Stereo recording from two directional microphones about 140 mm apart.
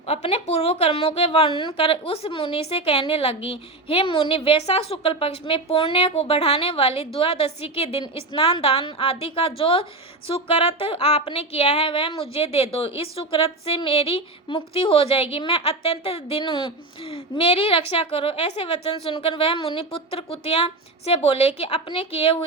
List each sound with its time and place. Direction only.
0.1 s a woman's voice: 45° left (ahead or behind)